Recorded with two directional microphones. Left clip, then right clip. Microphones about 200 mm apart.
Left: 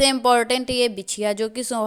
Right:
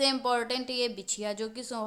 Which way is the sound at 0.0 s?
30° left (ahead or behind).